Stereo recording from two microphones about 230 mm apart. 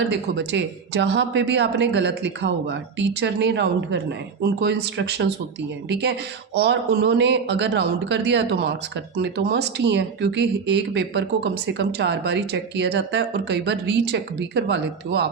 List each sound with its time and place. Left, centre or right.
0.1 s speech: right